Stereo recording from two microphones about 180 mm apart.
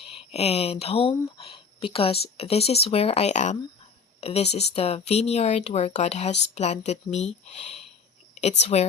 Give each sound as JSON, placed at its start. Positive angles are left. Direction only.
{"t": 0.0, "sound": "speech", "side_deg": 30}